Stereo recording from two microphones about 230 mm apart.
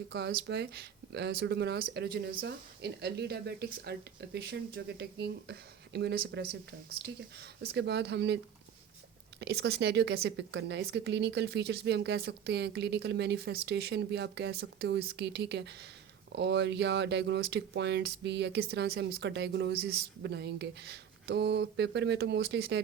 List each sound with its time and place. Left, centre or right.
0.1 s speech: right
9.4 s speech: right